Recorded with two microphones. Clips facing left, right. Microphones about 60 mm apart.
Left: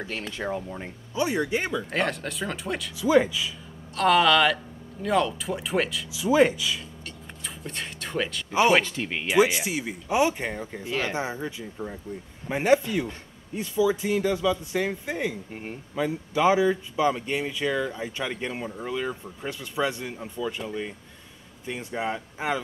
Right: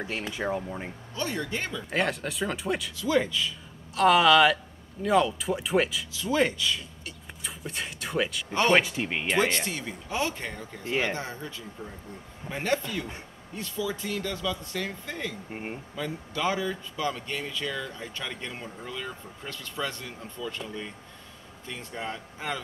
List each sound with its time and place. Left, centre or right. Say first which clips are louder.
0.0 s speech: even; centre
1.1 s speech: left 6 dB; centre
1.9 s speech: left 1 dB; centre
3.0 s speech: left 6 dB; centre
3.9 s speech: even; centre
6.1 s speech: left 6 dB; centre
7.1 s a sound: right 1 dB; centre
8.5 s speech: left 3 dB; centre
8.8 s speech: even; centre
9.3 s speech: left 6 dB; centre
15.5 s speech: right 1 dB; centre
15.9 s speech: left 11 dB; centre